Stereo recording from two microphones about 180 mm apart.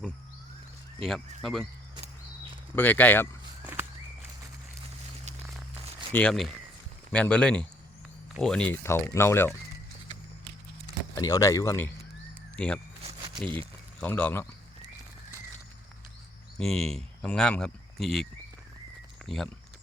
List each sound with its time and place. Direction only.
1.0 s speech: centre (ahead or behind)
2.7 s speech: 10° left (ahead or behind)
3.6 s walk: 10° right (ahead or behind)
6.1 s speech: 5° left (ahead or behind)
11.1 s speech: 20° left (ahead or behind)
13.0 s a sound: 30° right (ahead or behind)
13.6 s speech: 10° left (ahead or behind)
16.6 s speech: 5° left (ahead or behind)